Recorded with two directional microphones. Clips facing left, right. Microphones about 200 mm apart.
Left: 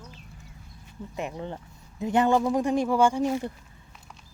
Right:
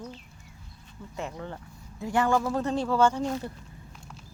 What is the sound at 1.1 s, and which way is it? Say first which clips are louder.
Speech: left 2 dB; 20° left (ahead or behind).